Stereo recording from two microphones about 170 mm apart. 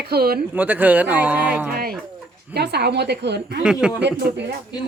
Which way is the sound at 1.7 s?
65° right (ahead or behind).